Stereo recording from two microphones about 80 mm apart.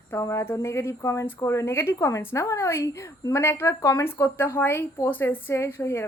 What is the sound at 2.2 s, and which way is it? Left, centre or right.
A woman's voice, left.